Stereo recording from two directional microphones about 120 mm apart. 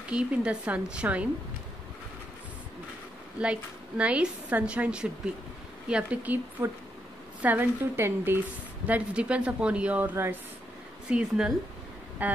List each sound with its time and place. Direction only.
0.1 s a woman's voice: 10° right (ahead or behind)
3.3 s a woman's voice: 10° right (ahead or behind)
11.1 s a woman's voice: 5° right (ahead or behind)